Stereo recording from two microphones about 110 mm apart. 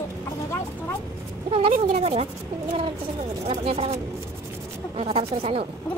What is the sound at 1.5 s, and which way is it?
Speech, 60° right (ahead or behind).